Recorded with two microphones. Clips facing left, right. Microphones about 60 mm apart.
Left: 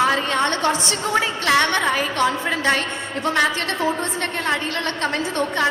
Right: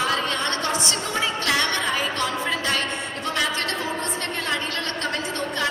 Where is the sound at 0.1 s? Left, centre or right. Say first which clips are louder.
Left 4 dB; left.